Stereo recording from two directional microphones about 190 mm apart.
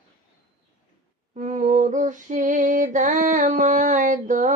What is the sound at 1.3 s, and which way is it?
Female singing, 40° right (ahead or behind).